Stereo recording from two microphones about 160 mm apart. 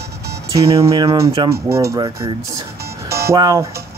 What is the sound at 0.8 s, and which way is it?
Speech, 20° right (ahead or behind).